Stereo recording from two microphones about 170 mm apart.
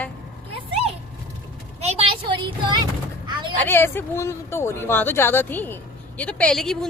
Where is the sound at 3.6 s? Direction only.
15° left (ahead or behind).